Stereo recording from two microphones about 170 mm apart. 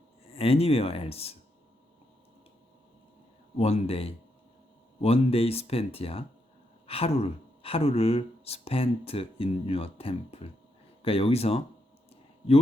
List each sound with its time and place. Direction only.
0.3 s speech: 35° left (ahead or behind)
3.6 s speech: 35° left (ahead or behind)